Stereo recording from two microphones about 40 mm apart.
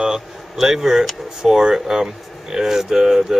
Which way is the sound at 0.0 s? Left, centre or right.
Centre.